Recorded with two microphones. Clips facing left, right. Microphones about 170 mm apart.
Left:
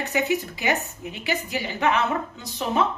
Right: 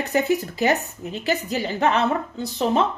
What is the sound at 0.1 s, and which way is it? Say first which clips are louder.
A woman's voice: right 4 dB; 40° right (ahead or behind).